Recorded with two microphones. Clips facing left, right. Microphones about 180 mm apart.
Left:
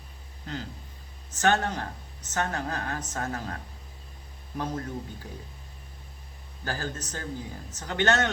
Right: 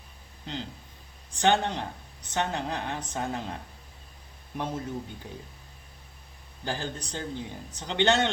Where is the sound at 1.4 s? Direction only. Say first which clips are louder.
Right 1 dB; 25° right (ahead or behind).